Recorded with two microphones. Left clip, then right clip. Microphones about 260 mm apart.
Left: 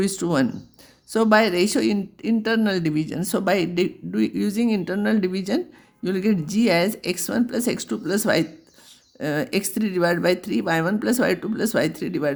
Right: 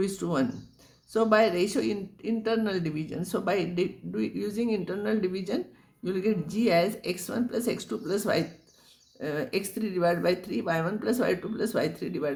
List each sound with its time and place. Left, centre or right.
0.0 s speech: left